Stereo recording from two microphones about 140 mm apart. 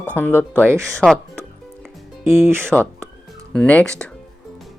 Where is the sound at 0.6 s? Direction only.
20° right (ahead or behind).